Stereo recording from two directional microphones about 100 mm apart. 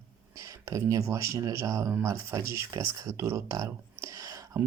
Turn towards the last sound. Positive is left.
turn(degrees=-35)  # may be behind; listen again after turning